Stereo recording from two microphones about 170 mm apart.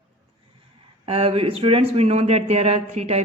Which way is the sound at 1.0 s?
35° right (ahead or behind).